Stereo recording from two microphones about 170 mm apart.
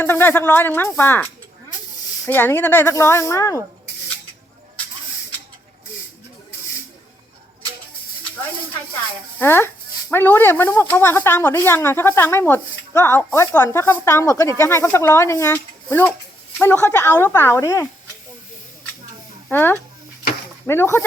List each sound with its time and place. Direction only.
0.0 s speech: 10° left (ahead or behind)
9.4 s speech: 15° left (ahead or behind)
19.5 s speech: 10° left (ahead or behind)